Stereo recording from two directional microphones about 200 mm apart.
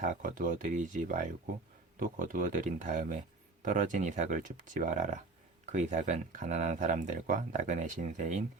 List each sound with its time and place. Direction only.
0.0 s speech: 40° right (ahead or behind)